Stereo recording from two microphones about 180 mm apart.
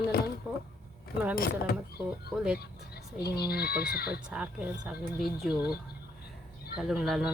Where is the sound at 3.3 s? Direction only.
60° left (ahead or behind).